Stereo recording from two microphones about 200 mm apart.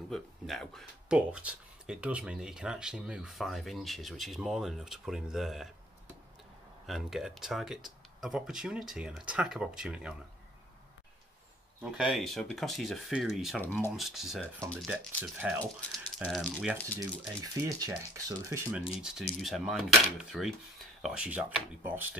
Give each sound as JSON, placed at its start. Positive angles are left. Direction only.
{"t": 0.1, "sound": "speech", "side_deg": 0}
{"t": 6.9, "sound": "speech", "side_deg": 0}
{"t": 11.8, "sound": "speech", "side_deg": -5}
{"t": 13.9, "sound": "speech", "side_deg": 0}
{"t": 17.4, "sound": "speech", "side_deg": -15}
{"t": 19.4, "sound": "speech", "side_deg": 0}